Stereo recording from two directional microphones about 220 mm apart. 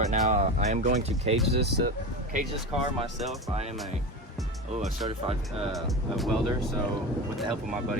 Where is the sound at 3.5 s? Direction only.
30° right (ahead or behind).